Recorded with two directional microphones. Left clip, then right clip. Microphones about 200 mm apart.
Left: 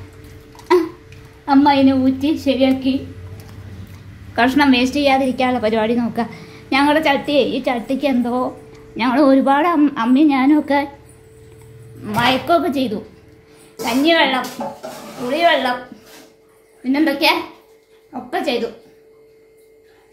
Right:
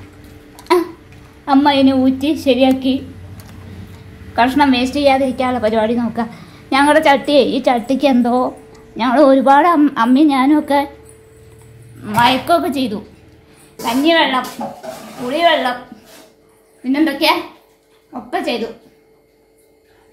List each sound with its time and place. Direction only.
1.4 s a woman's voice: 35° right (ahead or behind)
4.4 s a woman's voice: centre (ahead or behind); by 8.5 s 20° right (ahead or behind)
8.7 s a woman's voice: 5° right (ahead or behind)
12.0 s a woman's voice: centre (ahead or behind)
16.8 s a woman's voice: centre (ahead or behind)